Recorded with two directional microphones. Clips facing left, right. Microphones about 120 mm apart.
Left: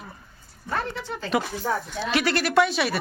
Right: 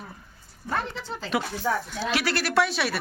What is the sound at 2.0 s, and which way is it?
A woman's voice, 5° right (ahead or behind).